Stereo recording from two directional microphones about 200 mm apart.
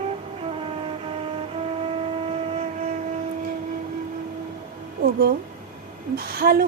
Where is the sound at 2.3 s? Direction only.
35° right (ahead or behind).